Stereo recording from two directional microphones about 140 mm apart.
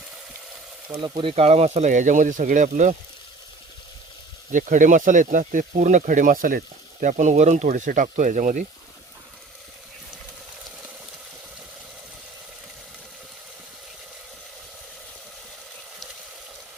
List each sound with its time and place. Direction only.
0.9 s speech: 35° right (ahead or behind); by 2.9 s 60° right (ahead or behind)
4.5 s speech: 65° right (ahead or behind)
7.0 s speech: 60° right (ahead or behind)